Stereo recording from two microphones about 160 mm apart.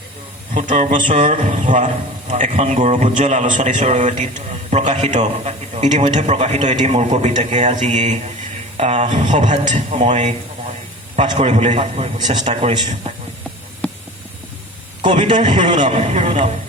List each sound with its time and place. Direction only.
0.5 s a man's voice: 50° right (ahead or behind)
11.3 s a man's voice: 40° right (ahead or behind)
15.0 s a man's voice: 50° right (ahead or behind)